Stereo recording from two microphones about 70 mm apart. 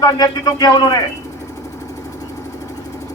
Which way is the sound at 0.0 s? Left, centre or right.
Left.